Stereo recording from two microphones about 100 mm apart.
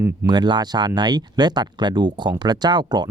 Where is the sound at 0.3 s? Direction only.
50° right (ahead or behind).